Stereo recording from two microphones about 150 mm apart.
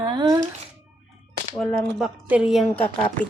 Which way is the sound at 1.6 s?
Centre (ahead or behind).